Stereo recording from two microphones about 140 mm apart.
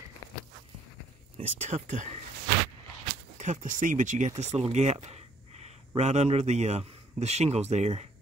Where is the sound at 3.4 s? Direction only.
60° right (ahead or behind).